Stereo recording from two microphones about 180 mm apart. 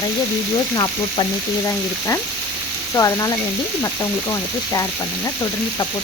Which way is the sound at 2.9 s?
20° left (ahead or behind).